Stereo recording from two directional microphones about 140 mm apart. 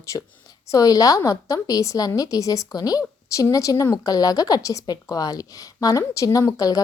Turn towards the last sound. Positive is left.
turn(degrees=25)  # may be behind; listen again after turning